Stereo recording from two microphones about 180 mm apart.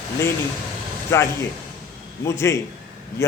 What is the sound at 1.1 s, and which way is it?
A man's voice, 15° left (ahead or behind).